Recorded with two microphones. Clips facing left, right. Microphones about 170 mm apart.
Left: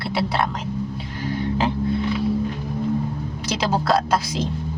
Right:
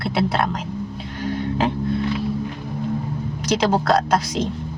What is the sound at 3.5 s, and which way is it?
Speech, centre (ahead or behind).